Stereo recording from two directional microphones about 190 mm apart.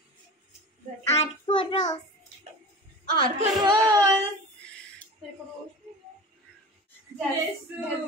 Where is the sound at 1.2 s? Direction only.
25° left (ahead or behind).